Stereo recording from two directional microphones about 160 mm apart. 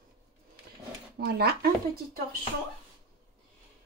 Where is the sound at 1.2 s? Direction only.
75° right (ahead or behind).